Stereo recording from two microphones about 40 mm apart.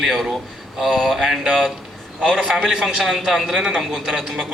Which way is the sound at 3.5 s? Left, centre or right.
Centre.